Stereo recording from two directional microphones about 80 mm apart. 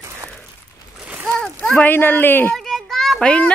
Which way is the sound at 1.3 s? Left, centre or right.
Centre.